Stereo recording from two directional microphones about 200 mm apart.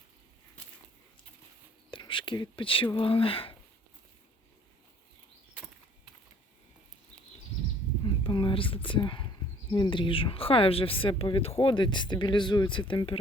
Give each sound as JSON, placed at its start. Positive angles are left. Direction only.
{"t": 1.9, "sound": "speech", "side_deg": 25}
{"t": 8.0, "sound": "a sound", "side_deg": 25}
{"t": 9.7, "sound": "speech", "side_deg": 25}